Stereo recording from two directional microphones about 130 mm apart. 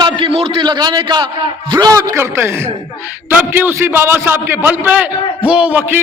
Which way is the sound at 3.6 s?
20° right (ahead or behind).